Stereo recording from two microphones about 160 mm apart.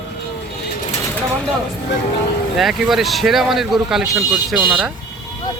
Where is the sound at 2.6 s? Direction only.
Centre (ahead or behind).